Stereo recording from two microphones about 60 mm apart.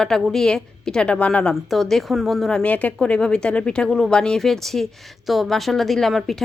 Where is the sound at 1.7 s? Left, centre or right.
Centre.